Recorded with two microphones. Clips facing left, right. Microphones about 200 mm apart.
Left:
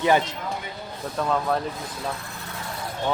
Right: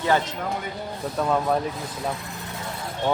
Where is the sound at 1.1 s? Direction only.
10° right (ahead or behind).